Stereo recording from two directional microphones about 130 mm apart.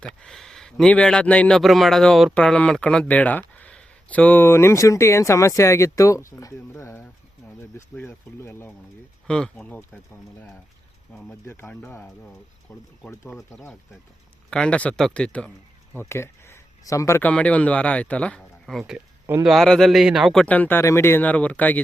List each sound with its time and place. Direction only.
0.0 s speech: 5° left (ahead or behind)
9.2 s speech: 5° left (ahead or behind)
11.1 s speech: 10° left (ahead or behind)
11.4 s speech: 20° left (ahead or behind)
16.0 s speech: 20° left (ahead or behind)
17.2 s speech: 10° left (ahead or behind)
20.4 s speech: 10° left (ahead or behind)